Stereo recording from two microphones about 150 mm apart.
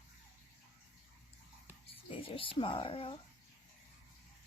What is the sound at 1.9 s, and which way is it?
Speech, 40° left (ahead or behind).